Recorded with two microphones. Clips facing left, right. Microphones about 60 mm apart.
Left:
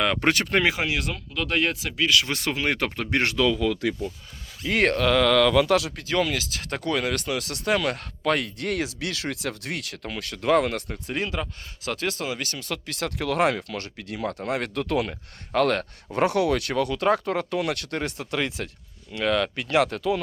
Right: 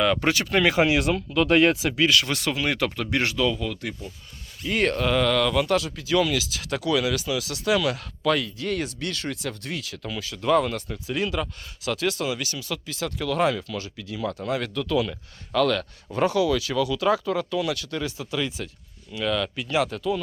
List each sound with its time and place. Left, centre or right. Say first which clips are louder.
0.0 s speech: even; left
0.7 s speech: right 6 dB; centre
2.2 s speech: even; left
3.3 s speech: left 2 dB; left
4.6 s speech: left 2 dB; left
6.1 s speech: right 4 dB; left
8.4 s speech: even; left
10.0 s speech: even; left
11.0 s speech: right 4 dB; left
12.5 s speech: even; left
16.1 s speech: even; left